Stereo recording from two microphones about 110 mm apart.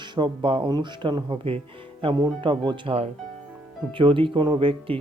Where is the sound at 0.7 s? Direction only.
40° right (ahead or behind).